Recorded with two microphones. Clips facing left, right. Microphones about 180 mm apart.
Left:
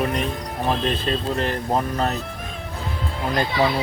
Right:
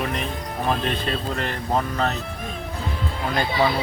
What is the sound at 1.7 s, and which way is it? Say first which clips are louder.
Speech: right 1 dB; 5° left (ahead or behind).